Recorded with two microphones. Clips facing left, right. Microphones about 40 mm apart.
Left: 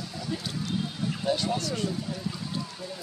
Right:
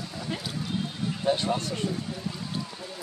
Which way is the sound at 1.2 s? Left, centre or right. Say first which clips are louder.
Right 2 dB; right.